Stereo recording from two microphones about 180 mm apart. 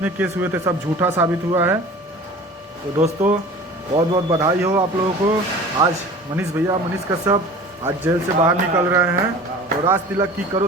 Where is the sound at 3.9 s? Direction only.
25° right (ahead or behind).